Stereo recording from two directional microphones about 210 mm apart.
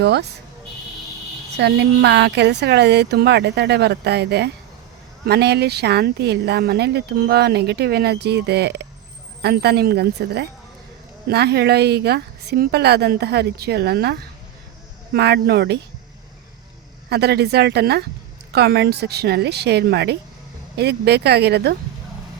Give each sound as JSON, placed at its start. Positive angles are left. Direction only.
{"t": 0.0, "sound": "speech", "side_deg": -55}
{"t": 1.5, "sound": "speech", "side_deg": -55}
{"t": 17.1, "sound": "speech", "side_deg": -50}